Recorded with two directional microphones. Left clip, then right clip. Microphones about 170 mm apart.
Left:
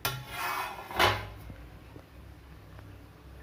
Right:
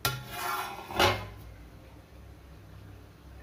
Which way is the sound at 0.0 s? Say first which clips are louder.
Right 1 dB; 60° right (ahead or behind).